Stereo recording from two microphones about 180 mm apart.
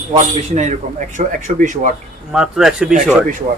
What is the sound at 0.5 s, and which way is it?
Speech, 40° right (ahead or behind).